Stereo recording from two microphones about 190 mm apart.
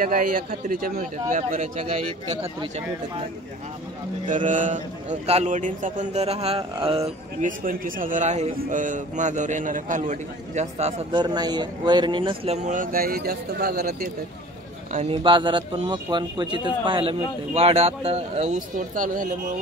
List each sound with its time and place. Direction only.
0.0 s a man's voice: 45° right (ahead or behind)
1.3 s a man's voice: 40° right (ahead or behind)
4.5 s a man's voice: 40° right (ahead or behind)
7.4 s a man's voice: 45° right (ahead or behind)
14.9 s a man's voice: 35° right (ahead or behind)
15.2 s a man's voice: 25° right (ahead or behind); by 19.2 s 45° right (ahead or behind)